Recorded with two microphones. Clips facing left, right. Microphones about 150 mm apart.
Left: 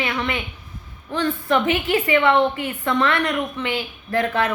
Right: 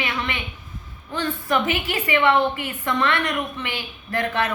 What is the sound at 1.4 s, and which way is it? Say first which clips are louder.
A woman's voice: left 3 dB; 35° left (ahead or behind).